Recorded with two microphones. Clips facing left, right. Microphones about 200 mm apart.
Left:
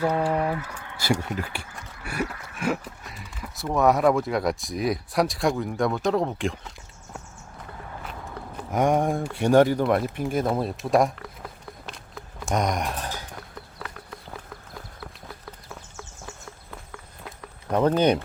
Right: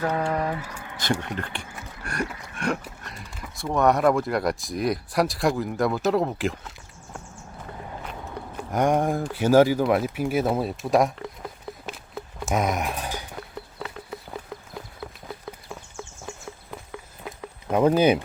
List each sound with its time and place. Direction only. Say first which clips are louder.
0.0 s speech: left 2 dB; 10° left (ahead or behind)
0.6 s speech: right 1 dB; 10° right (ahead or behind)
1.2 s speech: left 1 dB; 5° left (ahead or behind)
8.7 s speech: even; centre (ahead or behind)
11.9 s a sound: right 4 dB; 5° right (ahead or behind)
12.5 s speech: even; 5° right (ahead or behind)
17.7 s speech: right 2 dB; 10° right (ahead or behind)